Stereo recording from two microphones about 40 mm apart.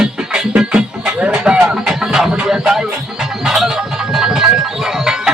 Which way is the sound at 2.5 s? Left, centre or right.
Centre.